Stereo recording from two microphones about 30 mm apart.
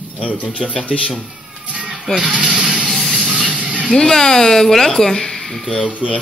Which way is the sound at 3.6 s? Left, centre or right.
Right.